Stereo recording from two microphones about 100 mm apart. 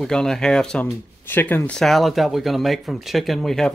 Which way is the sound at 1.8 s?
Centre (ahead or behind).